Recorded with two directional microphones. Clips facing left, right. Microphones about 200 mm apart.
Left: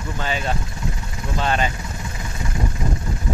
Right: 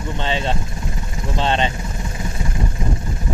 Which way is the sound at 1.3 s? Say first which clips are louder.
Right 2 dB; 25° right (ahead or behind).